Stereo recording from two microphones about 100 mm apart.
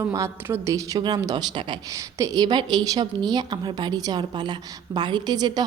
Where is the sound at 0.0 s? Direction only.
30° right (ahead or behind).